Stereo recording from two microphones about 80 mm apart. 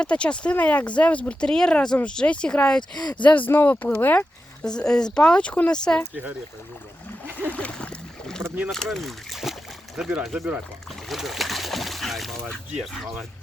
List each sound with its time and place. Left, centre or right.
0.0 s speech: centre
3.0 s speech: left
3.2 s speech: left
4.6 s speech: centre
7.5 s a sound: centre
8.3 s rowboat: centre
8.7 s speech: centre
10.0 s speech: centre
11.1 s speech: centre